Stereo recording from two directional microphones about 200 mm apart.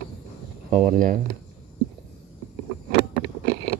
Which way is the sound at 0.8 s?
40° right (ahead or behind).